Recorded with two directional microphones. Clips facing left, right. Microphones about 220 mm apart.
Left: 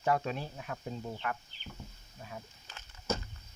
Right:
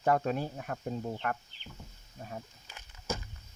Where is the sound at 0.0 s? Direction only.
50° right (ahead or behind).